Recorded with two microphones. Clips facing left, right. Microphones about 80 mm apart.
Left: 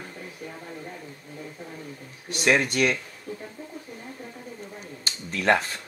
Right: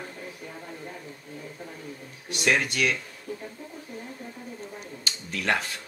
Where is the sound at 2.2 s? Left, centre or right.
Left.